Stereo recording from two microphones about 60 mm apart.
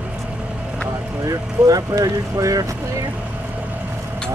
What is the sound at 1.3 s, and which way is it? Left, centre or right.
Speech, right.